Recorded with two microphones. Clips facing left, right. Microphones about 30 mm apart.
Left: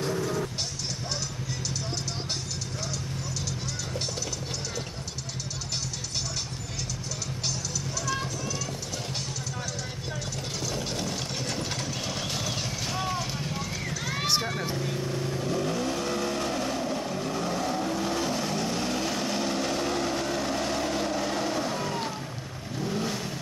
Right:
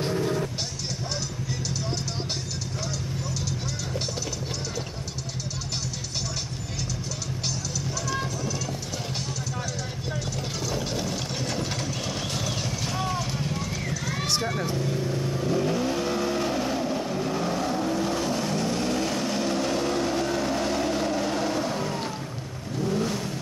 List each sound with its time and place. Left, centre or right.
0.0 s music: right
10.7 s vehicle: centre